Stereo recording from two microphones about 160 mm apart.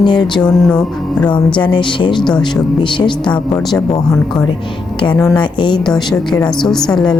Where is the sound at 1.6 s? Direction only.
30° left (ahead or behind).